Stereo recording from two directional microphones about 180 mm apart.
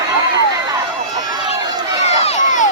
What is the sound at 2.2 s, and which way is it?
Crowd, 45° left (ahead or behind).